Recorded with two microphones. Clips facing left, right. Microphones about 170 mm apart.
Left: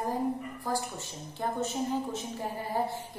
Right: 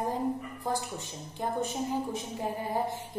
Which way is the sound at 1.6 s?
15° right (ahead or behind).